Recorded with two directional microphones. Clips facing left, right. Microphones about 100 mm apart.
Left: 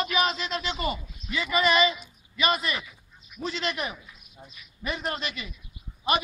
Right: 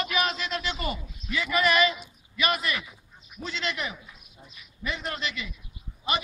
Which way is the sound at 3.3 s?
25° right (ahead or behind).